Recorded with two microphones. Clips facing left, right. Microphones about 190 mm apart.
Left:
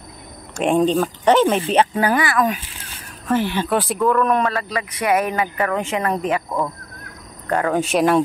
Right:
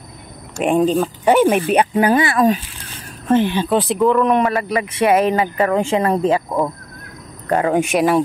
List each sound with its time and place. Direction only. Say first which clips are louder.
0.6 s speech: right 1 dB; 5° right (ahead or behind); by 2.6 s 30° right (ahead or behind)
3.3 s speech: right 4 dB; 20° right (ahead or behind)